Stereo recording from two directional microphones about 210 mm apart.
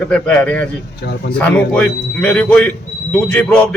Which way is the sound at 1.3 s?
5° left (ahead or behind).